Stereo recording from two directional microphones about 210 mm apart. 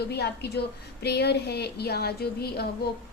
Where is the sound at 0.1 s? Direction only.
50° left (ahead or behind).